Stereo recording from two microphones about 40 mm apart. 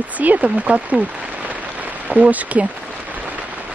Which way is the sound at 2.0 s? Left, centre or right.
Right.